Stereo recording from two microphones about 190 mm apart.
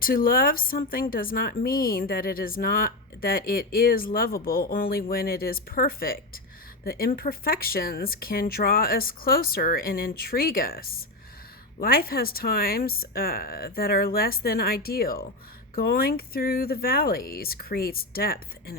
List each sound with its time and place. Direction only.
0.0 s a woman's voice: 50° left (ahead or behind)